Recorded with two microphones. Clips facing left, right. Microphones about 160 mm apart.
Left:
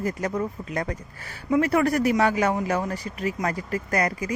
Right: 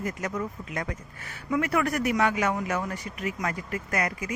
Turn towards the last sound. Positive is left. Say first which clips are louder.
# left 4 dB
turn(degrees=35)  # may be behind; listen again after turning